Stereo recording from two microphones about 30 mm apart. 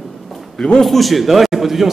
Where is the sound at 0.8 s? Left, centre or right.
Centre.